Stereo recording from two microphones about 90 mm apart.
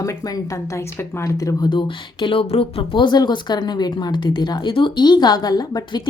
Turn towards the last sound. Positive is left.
turn(degrees=45)  # may be behind; listen again after turning